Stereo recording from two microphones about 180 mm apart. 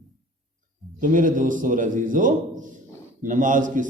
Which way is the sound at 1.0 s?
45° right (ahead or behind).